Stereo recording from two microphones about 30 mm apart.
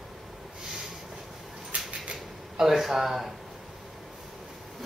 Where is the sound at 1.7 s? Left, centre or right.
Right.